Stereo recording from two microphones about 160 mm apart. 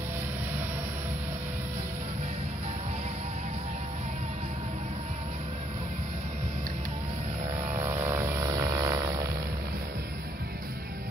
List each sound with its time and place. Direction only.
7.7 s vehicle: 15° right (ahead or behind)